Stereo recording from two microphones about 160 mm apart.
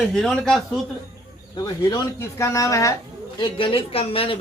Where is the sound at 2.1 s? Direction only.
20° left (ahead or behind).